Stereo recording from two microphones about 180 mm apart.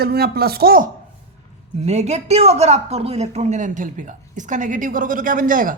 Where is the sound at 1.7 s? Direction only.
40° right (ahead or behind).